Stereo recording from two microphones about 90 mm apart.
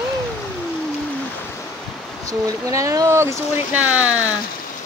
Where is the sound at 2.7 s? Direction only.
35° right (ahead or behind).